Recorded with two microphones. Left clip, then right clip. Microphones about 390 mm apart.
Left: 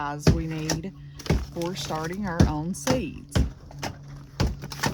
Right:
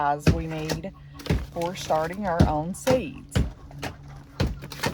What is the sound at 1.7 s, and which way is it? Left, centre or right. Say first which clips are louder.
Speech: right 7 dB; centre.